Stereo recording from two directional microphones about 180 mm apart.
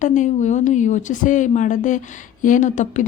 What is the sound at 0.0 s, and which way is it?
Speech, 45° left (ahead or behind).